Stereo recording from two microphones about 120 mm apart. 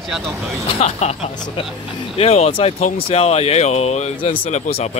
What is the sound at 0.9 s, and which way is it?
Speech, 65° left (ahead or behind).